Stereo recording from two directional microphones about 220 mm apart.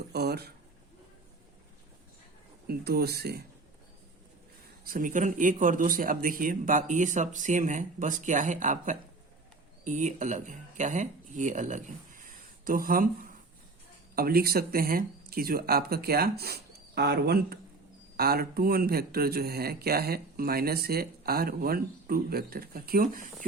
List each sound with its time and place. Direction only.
0.1 s speech: 45° right (ahead or behind)
2.6 s speech: 45° right (ahead or behind)
4.9 s speech: 35° right (ahead or behind)